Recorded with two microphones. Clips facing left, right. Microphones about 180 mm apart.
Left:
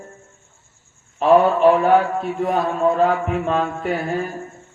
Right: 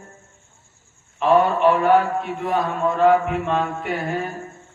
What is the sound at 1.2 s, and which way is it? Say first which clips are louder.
Mantra: left 3 dB; 40° left (ahead or behind).